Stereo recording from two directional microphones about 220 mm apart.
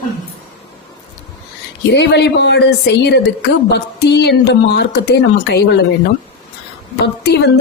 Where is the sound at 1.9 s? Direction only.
50° left (ahead or behind).